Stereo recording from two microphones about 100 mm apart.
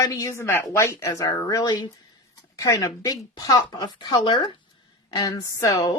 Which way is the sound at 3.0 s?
35° left (ahead or behind).